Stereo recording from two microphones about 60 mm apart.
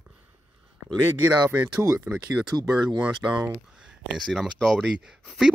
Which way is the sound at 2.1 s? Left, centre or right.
Right.